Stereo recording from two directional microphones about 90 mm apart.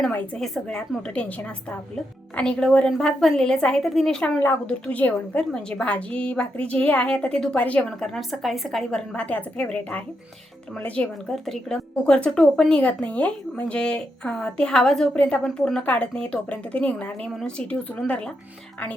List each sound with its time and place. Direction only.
0.3 s a woman's voice: 5° left (ahead or behind)
2.3 s a woman's voice: 10° left (ahead or behind)
4.6 s a woman's voice: 15° left (ahead or behind)
7.9 s a woman's voice: 5° left (ahead or behind)
8.8 s a woman's voice: 10° left (ahead or behind)
11.3 s a woman's voice: 5° left (ahead or behind)